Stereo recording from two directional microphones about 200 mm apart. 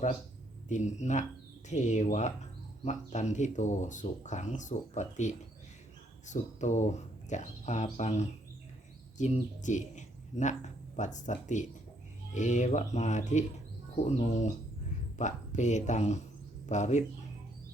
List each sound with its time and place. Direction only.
0.7 s speech: 35° left (ahead or behind)